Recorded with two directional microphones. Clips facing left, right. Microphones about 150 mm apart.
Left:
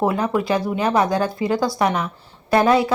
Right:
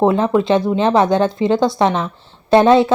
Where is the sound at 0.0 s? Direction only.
25° right (ahead or behind).